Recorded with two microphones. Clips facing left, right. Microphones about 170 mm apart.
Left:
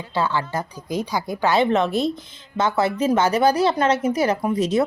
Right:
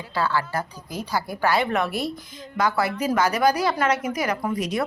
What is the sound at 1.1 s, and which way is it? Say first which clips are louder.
A woman's voice: left 1 dB; 20° left (ahead or behind).